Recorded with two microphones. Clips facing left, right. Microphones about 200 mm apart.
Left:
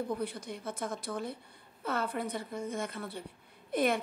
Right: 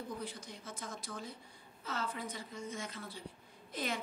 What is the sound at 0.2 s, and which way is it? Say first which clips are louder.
A woman's voice: left 8 dB; 60° left (ahead or behind).